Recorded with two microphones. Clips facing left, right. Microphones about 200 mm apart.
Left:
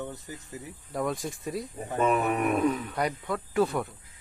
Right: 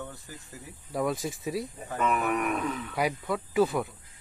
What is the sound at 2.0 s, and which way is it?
Speech, 30° left (ahead or behind).